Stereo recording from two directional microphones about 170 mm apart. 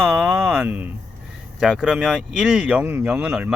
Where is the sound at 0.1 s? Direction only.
15° right (ahead or behind).